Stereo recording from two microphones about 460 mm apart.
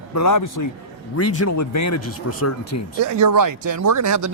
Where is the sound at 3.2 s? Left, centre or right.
Right.